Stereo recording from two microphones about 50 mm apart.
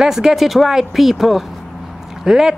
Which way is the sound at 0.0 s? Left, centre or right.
Centre.